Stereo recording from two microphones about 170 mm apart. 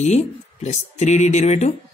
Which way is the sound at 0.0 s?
40° left (ahead or behind).